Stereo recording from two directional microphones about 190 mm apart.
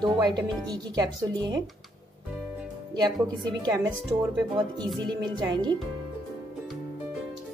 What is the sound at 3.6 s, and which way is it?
Speech, 20° right (ahead or behind).